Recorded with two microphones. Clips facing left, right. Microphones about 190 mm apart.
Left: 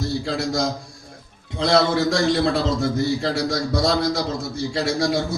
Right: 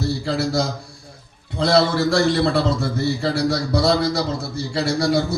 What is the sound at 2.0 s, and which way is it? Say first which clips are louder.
A man's voice: right 1 dB; 65° right (ahead or behind).